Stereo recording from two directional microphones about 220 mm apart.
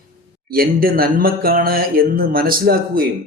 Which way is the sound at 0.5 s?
40° right (ahead or behind).